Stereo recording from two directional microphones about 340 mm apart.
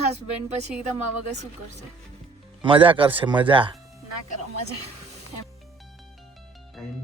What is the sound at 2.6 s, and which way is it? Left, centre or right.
Speech, centre.